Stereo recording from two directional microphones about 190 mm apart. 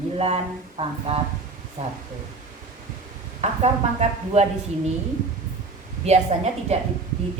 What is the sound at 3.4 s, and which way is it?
A woman's voice, 35° right (ahead or behind).